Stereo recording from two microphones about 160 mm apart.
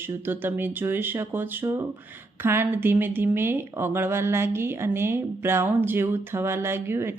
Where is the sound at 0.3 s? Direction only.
15° right (ahead or behind).